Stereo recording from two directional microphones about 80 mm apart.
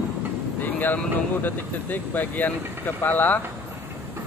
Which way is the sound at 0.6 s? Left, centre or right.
Left.